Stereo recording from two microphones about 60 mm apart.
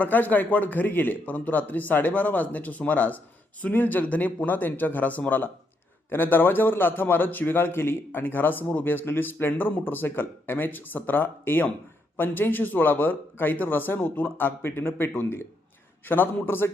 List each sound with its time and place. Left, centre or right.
0.0 s a man's voice: left